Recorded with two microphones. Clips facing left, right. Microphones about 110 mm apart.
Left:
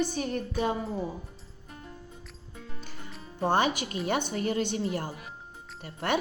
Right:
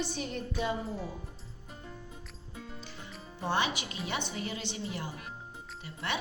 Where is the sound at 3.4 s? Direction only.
50° left (ahead or behind).